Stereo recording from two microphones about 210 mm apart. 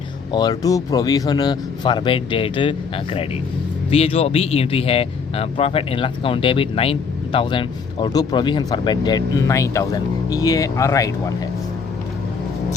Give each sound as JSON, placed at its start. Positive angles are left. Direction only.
{"t": 0.3, "sound": "speech", "side_deg": 20}